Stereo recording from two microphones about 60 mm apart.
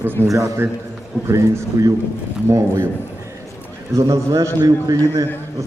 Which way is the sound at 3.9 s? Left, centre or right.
Right.